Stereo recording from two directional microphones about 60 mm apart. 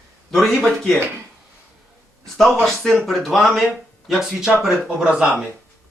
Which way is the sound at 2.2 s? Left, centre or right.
Centre.